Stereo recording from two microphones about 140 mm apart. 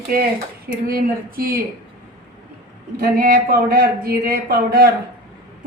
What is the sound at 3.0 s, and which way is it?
A woman's voice, 90° right.